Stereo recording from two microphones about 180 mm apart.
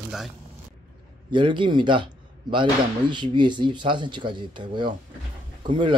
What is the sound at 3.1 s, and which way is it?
Speech, 25° right (ahead or behind).